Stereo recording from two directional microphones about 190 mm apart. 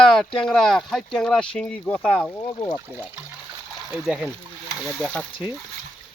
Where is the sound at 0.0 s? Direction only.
5° left (ahead or behind).